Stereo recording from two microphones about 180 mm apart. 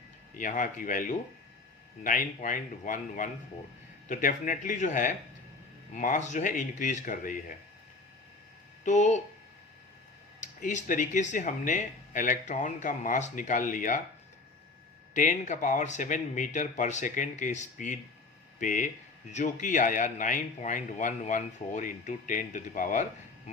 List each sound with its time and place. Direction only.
0.3 s speech: 45° left (ahead or behind)
8.8 s speech: 40° left (ahead or behind)
10.4 s speech: 40° left (ahead or behind)
15.1 s speech: 45° left (ahead or behind)